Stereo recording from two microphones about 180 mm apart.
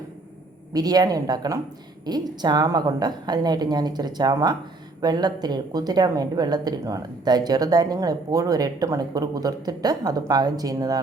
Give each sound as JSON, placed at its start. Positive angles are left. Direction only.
{"t": 0.7, "sound": "a woman's voice", "side_deg": -20}